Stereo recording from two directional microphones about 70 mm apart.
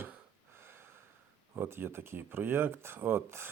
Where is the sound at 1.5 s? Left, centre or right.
Right.